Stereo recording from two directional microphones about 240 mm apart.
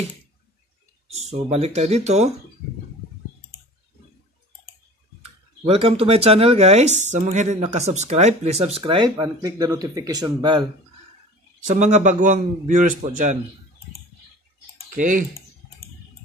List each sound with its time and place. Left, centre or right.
1.5 s speech: right
5.7 s speech: right
11.6 s a man's voice: right
15.0 s a man's voice: right